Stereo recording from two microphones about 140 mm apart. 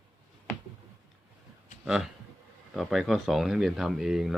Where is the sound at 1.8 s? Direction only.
5° right (ahead or behind).